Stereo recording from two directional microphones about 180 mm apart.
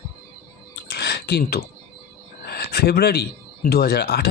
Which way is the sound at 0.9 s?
65° left (ahead or behind).